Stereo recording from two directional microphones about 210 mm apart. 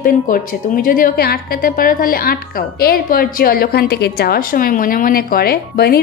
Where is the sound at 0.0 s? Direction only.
40° left (ahead or behind).